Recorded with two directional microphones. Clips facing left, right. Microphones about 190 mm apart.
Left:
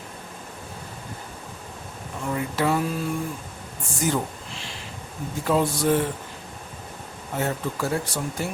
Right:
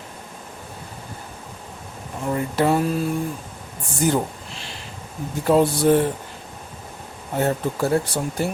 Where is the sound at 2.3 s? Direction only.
35° right (ahead or behind).